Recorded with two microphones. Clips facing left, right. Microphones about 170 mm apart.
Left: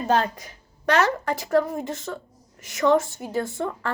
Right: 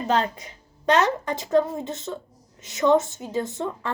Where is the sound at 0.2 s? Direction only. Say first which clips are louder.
Even; 20° right (ahead or behind).